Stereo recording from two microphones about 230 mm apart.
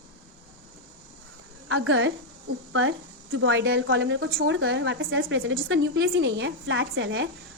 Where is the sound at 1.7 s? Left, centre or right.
Right.